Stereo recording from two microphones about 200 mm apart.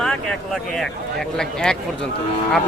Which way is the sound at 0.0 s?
Centre (ahead or behind).